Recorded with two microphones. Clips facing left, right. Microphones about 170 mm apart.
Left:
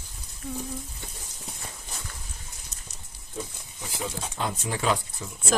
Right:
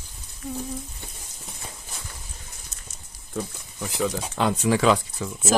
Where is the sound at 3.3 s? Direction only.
65° right (ahead or behind).